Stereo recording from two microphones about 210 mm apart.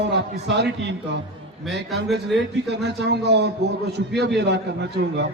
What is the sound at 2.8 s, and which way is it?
A man's voice, 55° right (ahead or behind).